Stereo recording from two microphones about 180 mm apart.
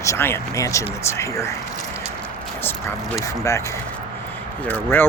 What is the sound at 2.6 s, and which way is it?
Speech, 10° left (ahead or behind).